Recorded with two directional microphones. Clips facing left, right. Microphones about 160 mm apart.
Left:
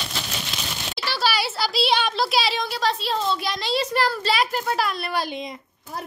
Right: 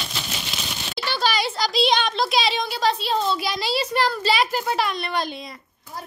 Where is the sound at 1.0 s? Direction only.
5° left (ahead or behind).